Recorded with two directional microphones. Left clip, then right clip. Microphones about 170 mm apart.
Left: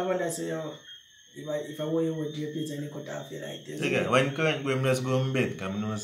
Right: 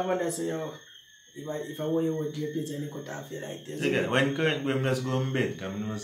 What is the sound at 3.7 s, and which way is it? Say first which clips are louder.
A man's voice: left 1 dB; 15° left (ahead or behind).